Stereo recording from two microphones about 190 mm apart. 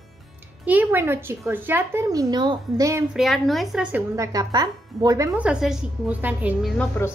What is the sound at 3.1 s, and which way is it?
Speech, centre (ahead or behind).